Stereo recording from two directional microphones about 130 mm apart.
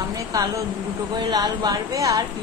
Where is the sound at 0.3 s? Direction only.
25° right (ahead or behind).